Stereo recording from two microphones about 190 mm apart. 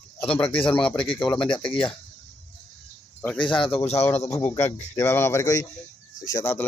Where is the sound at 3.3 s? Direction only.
25° left (ahead or behind).